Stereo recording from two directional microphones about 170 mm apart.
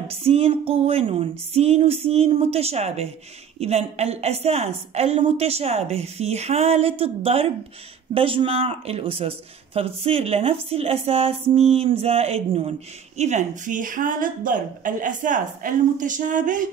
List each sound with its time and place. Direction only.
0.1 s a woman's voice: 35° right (ahead or behind)